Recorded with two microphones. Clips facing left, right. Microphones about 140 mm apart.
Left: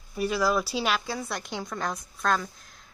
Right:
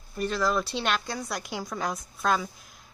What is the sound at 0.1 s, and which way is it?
Speech, 10° left (ahead or behind).